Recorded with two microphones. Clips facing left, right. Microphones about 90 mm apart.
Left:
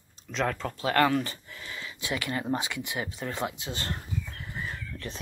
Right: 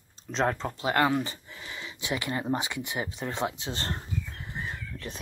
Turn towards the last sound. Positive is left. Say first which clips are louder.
# even
turn(degrees=-10)  # may be behind; listen again after turning